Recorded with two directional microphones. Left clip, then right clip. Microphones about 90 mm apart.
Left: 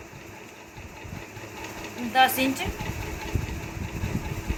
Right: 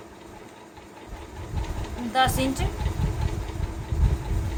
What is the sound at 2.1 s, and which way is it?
Speech, 25° right (ahead or behind).